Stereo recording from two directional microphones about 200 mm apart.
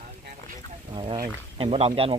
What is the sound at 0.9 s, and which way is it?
Boat, 25° right (ahead or behind).